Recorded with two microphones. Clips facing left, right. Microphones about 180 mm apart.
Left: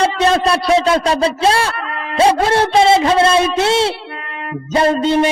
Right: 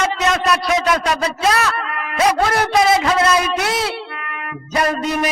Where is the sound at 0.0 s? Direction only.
30° left (ahead or behind).